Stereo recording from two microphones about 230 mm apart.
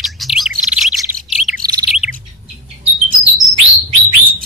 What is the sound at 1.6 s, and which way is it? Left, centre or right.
Bird, centre.